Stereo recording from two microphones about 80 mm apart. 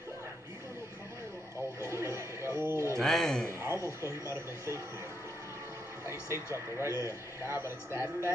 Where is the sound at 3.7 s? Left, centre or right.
Left.